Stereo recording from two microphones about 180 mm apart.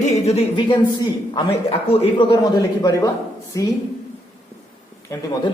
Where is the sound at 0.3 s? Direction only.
30° left (ahead or behind).